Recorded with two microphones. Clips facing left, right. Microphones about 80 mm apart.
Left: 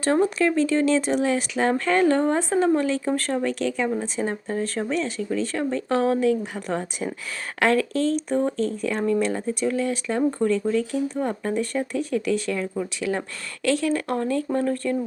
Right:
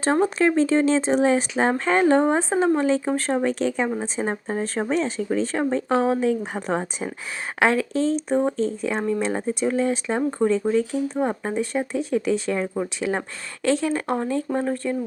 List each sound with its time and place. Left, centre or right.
0.0 s speech: right
7.6 s speech: centre